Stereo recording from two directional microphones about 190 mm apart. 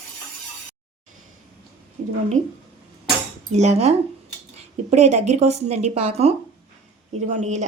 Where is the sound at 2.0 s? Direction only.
35° right (ahead or behind).